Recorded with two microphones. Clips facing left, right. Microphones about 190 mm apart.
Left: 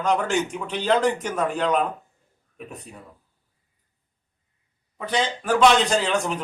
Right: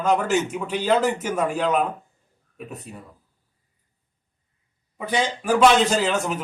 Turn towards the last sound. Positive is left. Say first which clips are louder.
# even
turn(degrees=-5)  # may be behind; listen again after turning